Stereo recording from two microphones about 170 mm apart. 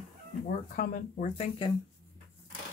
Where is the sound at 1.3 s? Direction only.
35° left (ahead or behind).